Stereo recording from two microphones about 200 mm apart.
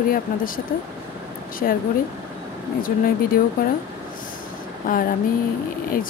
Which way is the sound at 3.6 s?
45° left (ahead or behind).